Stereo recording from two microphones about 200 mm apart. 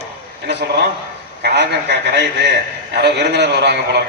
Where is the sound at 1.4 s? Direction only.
55° right (ahead or behind).